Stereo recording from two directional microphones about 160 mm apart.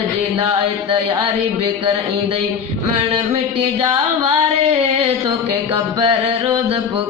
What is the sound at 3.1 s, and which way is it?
Music, 35° right (ahead or behind).